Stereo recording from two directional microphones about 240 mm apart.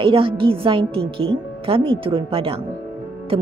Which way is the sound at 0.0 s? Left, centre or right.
Right.